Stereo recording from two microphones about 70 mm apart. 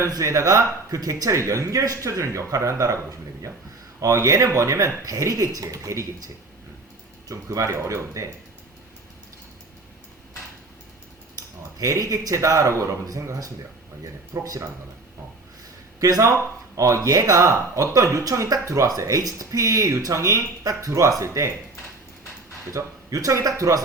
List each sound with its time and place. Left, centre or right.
0.1 s speech: right
11.8 s speech: right
16.0 s speech: right
22.7 s speech: right